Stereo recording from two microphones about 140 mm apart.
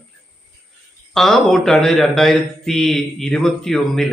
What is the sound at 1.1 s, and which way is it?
A man's voice, centre (ahead or behind).